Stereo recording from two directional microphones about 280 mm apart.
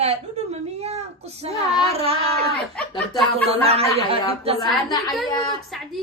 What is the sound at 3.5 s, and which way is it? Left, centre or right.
Speech, right.